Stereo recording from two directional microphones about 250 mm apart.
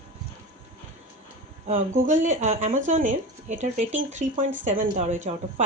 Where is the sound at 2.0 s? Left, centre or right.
Right.